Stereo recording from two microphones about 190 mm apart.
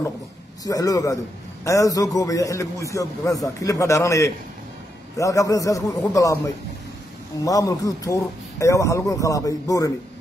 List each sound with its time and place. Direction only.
0.7 s a man's voice: 20° left (ahead or behind)